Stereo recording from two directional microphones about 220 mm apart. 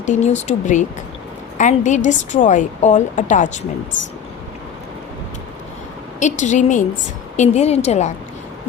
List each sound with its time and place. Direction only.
0.0 s a woman's voice: 30° left (ahead or behind)
6.1 s a woman's voice: 35° left (ahead or behind)